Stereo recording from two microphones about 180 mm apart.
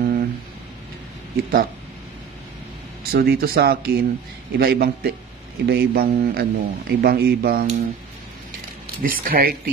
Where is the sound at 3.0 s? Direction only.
60° right (ahead or behind).